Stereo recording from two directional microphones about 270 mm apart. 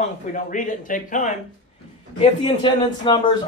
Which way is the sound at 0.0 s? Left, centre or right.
Left.